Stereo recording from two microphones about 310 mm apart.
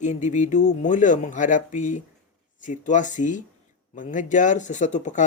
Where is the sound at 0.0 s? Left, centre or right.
Left.